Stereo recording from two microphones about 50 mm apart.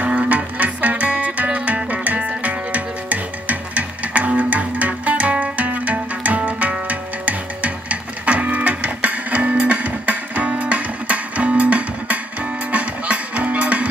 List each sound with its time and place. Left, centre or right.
0.0 s music: right